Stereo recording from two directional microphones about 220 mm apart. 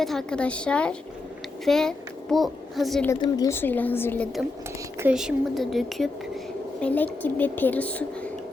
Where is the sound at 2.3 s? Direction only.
Centre (ahead or behind).